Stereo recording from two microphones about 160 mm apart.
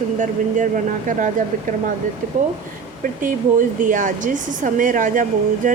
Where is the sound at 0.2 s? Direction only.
55° right (ahead or behind).